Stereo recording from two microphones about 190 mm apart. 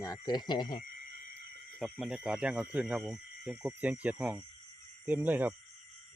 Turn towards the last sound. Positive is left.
turn(degrees=-10)  # may be behind; listen again after turning